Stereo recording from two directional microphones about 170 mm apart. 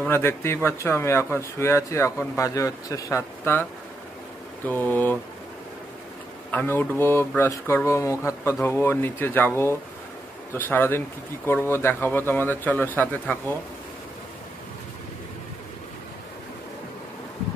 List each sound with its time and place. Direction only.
0.0 s speech: 15° left (ahead or behind)
4.6 s speech: 10° left (ahead or behind)
6.5 s speech: 10° left (ahead or behind)